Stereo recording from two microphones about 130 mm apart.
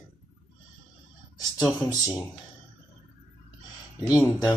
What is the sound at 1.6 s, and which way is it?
Speech, 25° left (ahead or behind).